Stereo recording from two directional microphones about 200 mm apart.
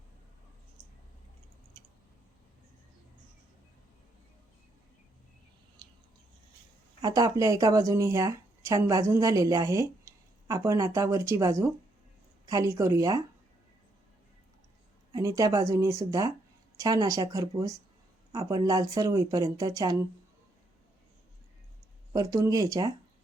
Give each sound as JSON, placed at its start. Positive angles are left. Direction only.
{"t": 5.8, "sound": "a sound", "side_deg": -25}
{"t": 7.0, "sound": "speech", "side_deg": -20}
{"t": 15.1, "sound": "speech", "side_deg": -15}
{"t": 22.1, "sound": "speech", "side_deg": -15}